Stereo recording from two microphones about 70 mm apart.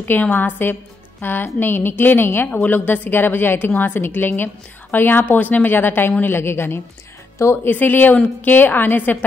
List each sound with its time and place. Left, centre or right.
0.0 s a woman's voice: left
7.7 s a woman's voice: left